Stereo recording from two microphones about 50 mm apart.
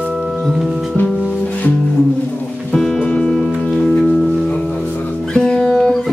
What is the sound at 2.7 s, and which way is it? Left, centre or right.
Music, centre.